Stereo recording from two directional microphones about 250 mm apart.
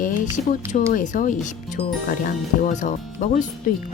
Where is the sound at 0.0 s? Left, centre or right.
Left.